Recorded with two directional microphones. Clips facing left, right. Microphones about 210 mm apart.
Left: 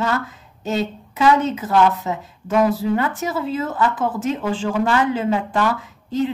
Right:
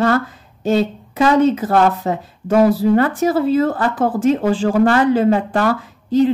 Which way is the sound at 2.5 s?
35° right (ahead or behind).